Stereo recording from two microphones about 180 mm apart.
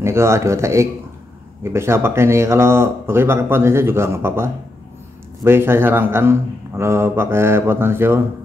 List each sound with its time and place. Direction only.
0.0 s speech: 15° right (ahead or behind)